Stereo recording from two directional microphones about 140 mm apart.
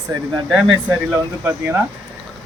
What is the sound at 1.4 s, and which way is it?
Speech, 15° right (ahead or behind).